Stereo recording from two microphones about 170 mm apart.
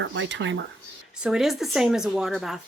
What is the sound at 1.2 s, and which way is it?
Speech, centre (ahead or behind).